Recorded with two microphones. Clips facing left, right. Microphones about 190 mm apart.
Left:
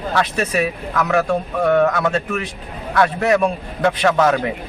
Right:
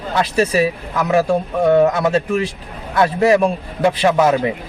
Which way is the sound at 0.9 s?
15° right (ahead or behind).